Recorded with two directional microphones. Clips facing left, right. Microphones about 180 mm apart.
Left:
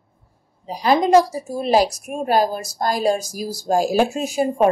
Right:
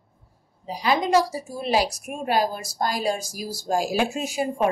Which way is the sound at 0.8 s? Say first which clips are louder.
Left 6 dB; 45° left (ahead or behind).